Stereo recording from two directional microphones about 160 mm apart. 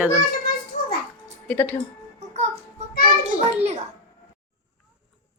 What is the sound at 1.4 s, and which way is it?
Speech, 10° left (ahead or behind).